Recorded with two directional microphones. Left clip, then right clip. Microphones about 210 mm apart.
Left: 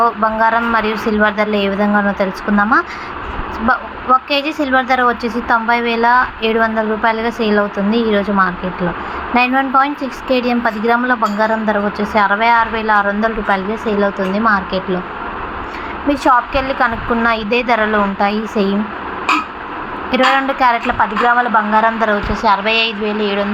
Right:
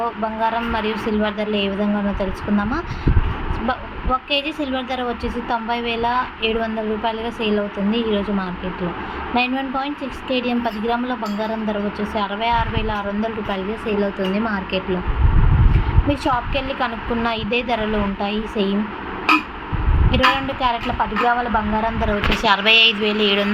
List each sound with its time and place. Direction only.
0.0 s a woman's voice: 10° left (ahead or behind)
16.0 s a woman's voice: 5° left (ahead or behind)
20.1 s a woman's voice: 10° left (ahead or behind)
21.2 s speech: 25° left (ahead or behind)
21.8 s a woman's voice: 5° left (ahead or behind)